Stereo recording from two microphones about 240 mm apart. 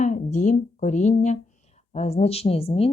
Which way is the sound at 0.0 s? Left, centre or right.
Left.